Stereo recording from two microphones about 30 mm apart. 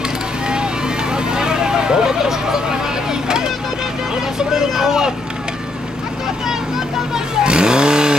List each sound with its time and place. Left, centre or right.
0.5 s vehicle: right
7.4 s vehicle: right